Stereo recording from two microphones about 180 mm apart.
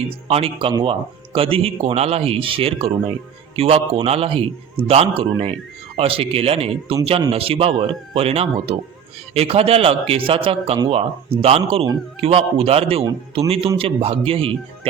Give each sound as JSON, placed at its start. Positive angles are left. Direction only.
{"t": 0.3, "sound": "speech", "side_deg": -30}